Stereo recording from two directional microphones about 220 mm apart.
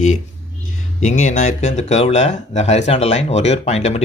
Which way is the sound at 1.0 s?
35° left (ahead or behind).